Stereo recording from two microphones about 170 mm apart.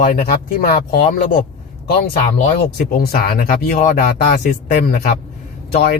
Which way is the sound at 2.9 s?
65° left (ahead or behind).